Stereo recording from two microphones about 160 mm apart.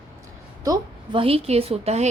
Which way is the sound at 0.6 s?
25° right (ahead or behind).